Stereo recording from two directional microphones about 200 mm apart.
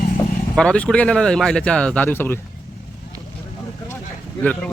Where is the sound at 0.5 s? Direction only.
5° left (ahead or behind).